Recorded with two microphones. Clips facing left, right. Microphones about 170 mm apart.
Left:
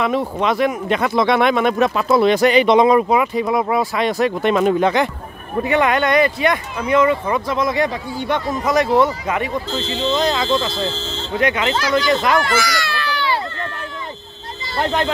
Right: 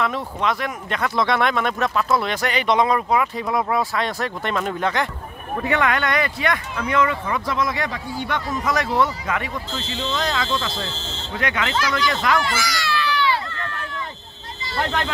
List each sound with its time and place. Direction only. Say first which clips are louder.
0.0 s speech: left 5 dB; 20° left (ahead or behind)
10.9 s speech: left 7 dB; 90° left
11.3 s speech: left 6 dB; 20° left (ahead or behind)
11.7 s speech: left 5 dB; 30° left (ahead or behind)
12.4 s a sound: left 5 dB; 55° left (ahead or behind); by 13.7 s 35° left (ahead or behind)
14.8 s speech: left 5 dB; 30° left (ahead or behind)